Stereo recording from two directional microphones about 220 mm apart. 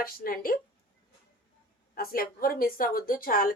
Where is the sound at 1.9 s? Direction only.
40° left (ahead or behind).